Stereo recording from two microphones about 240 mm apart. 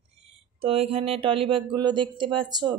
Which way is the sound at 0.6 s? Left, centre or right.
Right.